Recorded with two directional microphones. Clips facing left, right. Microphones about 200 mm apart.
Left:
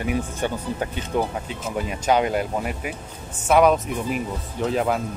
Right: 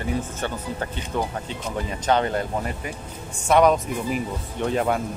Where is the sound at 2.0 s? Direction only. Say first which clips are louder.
Left 1 dB; 10° left (ahead or behind).